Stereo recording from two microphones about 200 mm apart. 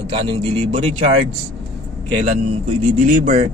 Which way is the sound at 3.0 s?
40° right (ahead or behind).